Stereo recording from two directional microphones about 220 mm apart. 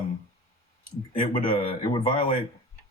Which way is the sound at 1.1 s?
25° left (ahead or behind).